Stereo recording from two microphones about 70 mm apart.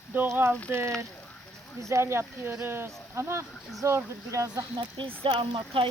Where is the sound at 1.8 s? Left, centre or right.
Right.